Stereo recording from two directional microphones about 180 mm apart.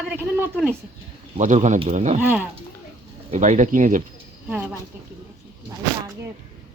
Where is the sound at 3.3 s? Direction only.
40° right (ahead or behind).